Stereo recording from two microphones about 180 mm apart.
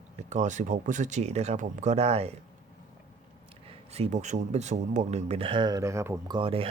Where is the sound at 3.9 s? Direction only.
40° right (ahead or behind); by 6.3 s 15° right (ahead or behind).